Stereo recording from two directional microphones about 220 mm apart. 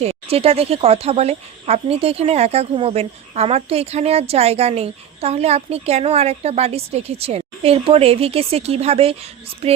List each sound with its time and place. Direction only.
0.0 s speech: 25° right (ahead or behind)